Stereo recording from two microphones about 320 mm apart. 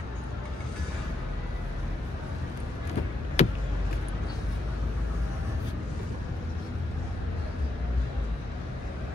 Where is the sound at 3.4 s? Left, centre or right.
Centre.